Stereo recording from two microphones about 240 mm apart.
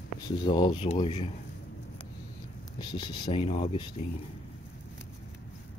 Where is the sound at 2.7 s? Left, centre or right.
Centre.